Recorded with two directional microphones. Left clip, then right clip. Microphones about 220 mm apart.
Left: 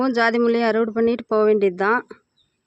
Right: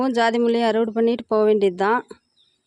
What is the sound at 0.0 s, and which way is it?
Speech, 5° right (ahead or behind).